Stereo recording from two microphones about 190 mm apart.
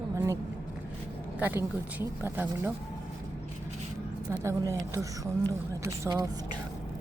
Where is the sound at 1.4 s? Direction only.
10° right (ahead or behind).